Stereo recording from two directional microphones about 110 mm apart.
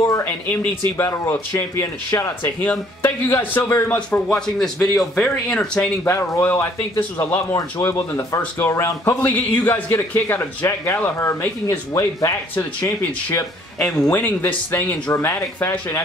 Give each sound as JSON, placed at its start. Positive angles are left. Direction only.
{"t": 0.2, "sound": "speech", "side_deg": 20}
{"t": 3.9, "sound": "speech", "side_deg": 10}
{"t": 6.0, "sound": "speech", "side_deg": 20}
{"t": 7.5, "sound": "speech", "side_deg": 30}
{"t": 13.7, "sound": "speech", "side_deg": 5}
{"t": 14.1, "sound": "speech", "side_deg": 15}